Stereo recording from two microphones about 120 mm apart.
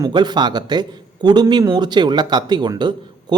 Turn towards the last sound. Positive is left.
turn(degrees=-40)  # may be behind; listen again after turning